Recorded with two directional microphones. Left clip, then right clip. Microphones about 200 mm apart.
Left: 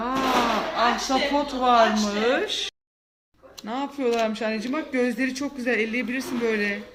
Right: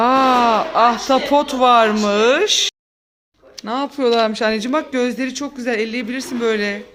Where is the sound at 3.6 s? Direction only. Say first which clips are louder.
Right 8 dB; 35° right (ahead or behind).